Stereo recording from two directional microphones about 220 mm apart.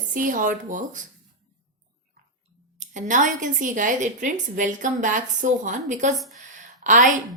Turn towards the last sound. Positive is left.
turn(degrees=-35)  # may be behind; listen again after turning